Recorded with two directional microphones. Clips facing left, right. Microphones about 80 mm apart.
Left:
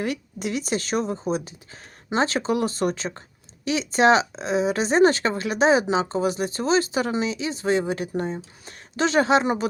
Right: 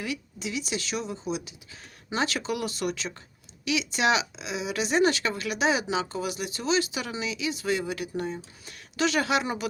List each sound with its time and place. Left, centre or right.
0.0 s speech: left